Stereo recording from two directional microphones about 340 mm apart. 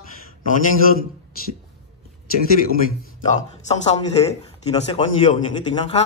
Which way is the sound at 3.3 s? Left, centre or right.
Centre.